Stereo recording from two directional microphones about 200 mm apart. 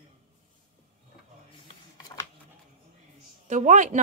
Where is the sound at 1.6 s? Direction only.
15° left (ahead or behind).